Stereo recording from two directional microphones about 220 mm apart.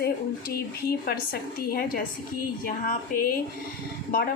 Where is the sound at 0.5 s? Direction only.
45° left (ahead or behind).